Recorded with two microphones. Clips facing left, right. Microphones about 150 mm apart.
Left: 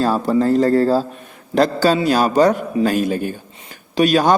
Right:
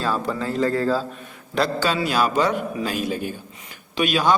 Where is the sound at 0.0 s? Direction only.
40° left (ahead or behind).